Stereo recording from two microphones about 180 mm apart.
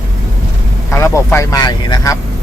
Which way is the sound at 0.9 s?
15° left (ahead or behind).